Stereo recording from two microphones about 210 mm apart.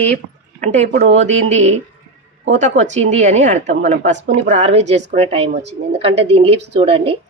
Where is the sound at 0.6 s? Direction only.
35° right (ahead or behind).